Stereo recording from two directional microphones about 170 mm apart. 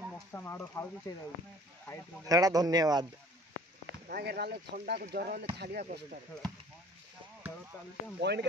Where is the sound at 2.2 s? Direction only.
20° right (ahead or behind).